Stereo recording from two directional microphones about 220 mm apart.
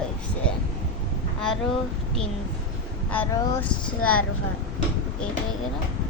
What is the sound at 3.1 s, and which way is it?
Speech, 5° left (ahead or behind).